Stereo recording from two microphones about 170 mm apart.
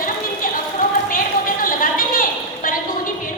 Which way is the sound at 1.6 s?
55° left (ahead or behind).